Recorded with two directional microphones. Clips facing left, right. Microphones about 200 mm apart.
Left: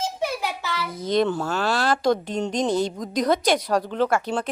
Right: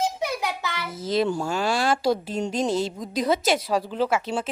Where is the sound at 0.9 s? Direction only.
5° right (ahead or behind).